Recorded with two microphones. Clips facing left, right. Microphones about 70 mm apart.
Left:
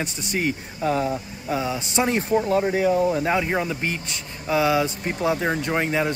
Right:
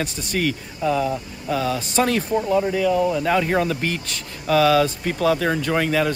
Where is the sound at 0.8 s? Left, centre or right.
Left.